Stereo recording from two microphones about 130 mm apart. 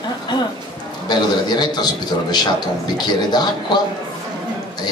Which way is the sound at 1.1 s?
35° left (ahead or behind).